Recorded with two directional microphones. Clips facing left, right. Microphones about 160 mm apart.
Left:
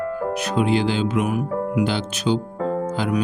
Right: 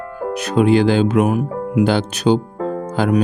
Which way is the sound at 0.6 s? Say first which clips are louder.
Right 7 dB; 50° right (ahead or behind).